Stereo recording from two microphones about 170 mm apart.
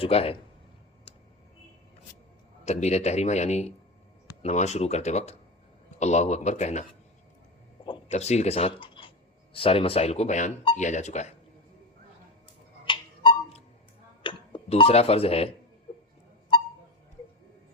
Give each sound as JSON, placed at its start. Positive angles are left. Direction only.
{"t": 0.0, "sound": "speech", "side_deg": 35}
{"t": 2.6, "sound": "speech", "side_deg": 40}
{"t": 8.1, "sound": "speech", "side_deg": 40}
{"t": 12.8, "sound": "tick-tock", "side_deg": 30}
{"t": 14.2, "sound": "doorbell", "side_deg": 30}